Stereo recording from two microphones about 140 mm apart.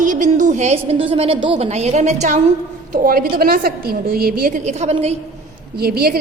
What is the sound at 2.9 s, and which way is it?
A woman's voice, 85° right.